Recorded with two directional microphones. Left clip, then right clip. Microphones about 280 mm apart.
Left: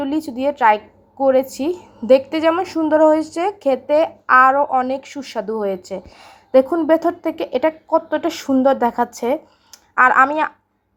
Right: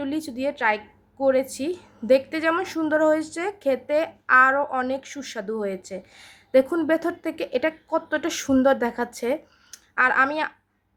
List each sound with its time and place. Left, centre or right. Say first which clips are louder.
0.0 s a woman's voice: left 7 dB; centre